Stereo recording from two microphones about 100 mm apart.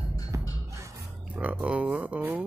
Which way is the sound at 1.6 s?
10° right (ahead or behind).